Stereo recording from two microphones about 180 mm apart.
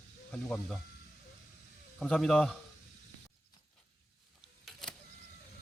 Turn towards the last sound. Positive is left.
turn(degrees=0)  # may be behind; listen again after turning